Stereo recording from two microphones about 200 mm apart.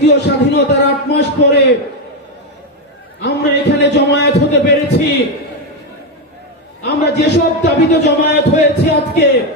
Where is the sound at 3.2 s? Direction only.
60° left (ahead or behind).